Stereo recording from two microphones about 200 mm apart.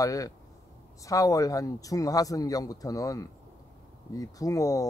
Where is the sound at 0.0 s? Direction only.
15° left (ahead or behind).